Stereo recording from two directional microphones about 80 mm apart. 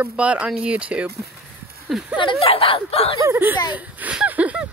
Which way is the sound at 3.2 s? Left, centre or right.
Right.